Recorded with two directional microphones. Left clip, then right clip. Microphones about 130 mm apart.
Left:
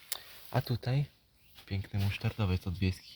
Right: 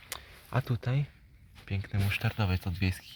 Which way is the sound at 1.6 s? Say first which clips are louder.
Right 3 dB; 20° left (ahead or behind).